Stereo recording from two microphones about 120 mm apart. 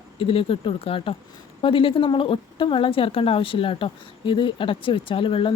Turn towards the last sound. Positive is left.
turn(degrees=45)  # may be behind; listen again after turning